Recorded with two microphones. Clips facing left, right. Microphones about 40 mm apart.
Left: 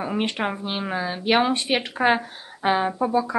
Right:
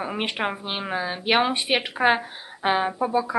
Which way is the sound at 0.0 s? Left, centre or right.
Centre.